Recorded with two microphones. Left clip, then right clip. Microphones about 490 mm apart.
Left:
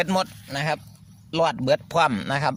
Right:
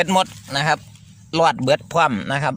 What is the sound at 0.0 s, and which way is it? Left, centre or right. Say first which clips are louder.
Speech: right 6 dB; left.